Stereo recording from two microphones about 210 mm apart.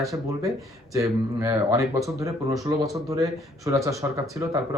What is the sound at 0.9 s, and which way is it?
Speech, 15° right (ahead or behind).